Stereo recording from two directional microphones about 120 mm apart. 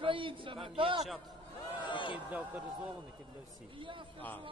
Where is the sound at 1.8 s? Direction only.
45° left (ahead or behind).